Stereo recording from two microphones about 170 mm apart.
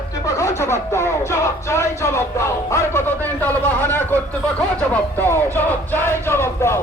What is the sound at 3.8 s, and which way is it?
Speech, 10° left (ahead or behind).